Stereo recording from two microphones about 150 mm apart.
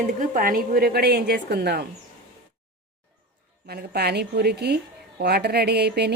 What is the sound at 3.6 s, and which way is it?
A woman's voice, 90° right.